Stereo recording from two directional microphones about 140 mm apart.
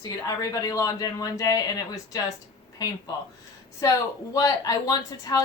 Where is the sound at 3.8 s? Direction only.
25° left (ahead or behind).